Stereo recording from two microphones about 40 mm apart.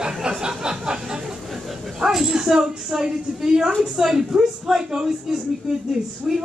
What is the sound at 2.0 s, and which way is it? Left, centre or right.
A woman's voice, centre.